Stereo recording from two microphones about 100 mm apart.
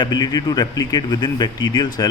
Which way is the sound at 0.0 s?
40° left (ahead or behind).